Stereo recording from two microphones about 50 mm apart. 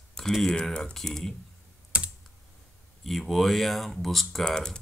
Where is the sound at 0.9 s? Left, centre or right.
Centre.